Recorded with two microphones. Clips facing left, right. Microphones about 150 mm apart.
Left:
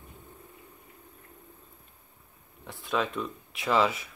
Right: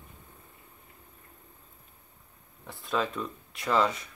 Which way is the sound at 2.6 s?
Centre (ahead or behind).